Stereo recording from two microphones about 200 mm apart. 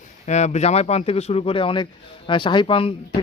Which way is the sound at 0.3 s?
35° left (ahead or behind).